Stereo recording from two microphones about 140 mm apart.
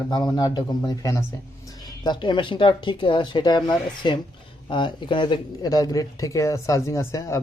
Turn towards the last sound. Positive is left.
turn(degrees=20)  # may be behind; listen again after turning